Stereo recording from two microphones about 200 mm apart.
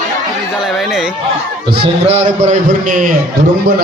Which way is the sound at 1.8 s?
30° right (ahead or behind).